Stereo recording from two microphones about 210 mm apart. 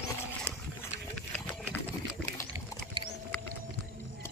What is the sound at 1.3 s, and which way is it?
Sewing machine, 5° left (ahead or behind).